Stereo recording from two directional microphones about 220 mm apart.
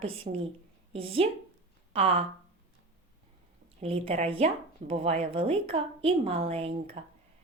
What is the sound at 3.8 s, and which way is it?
A woman's voice, 25° right (ahead or behind).